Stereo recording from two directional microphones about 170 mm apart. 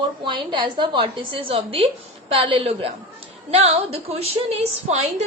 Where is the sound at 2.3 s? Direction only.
30° right (ahead or behind).